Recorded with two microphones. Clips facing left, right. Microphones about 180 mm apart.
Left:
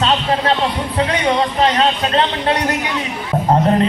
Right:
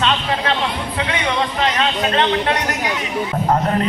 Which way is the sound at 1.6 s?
35° left (ahead or behind).